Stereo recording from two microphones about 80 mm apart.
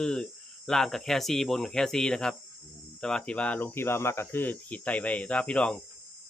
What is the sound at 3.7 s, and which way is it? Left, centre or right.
Speech, left.